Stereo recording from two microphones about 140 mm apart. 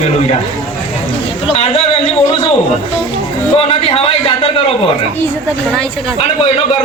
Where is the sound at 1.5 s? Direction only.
45° left (ahead or behind).